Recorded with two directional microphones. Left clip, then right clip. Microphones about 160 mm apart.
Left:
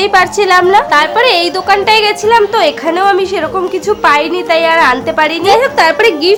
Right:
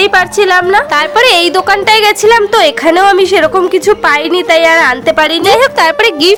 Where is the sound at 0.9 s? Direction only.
45° right (ahead or behind).